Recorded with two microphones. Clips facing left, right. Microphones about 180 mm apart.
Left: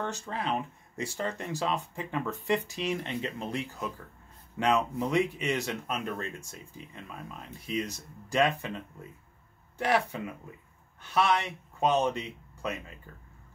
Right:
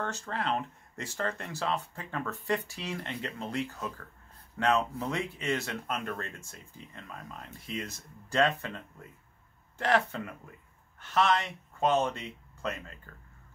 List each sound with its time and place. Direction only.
0.0 s speech: 15° left (ahead or behind)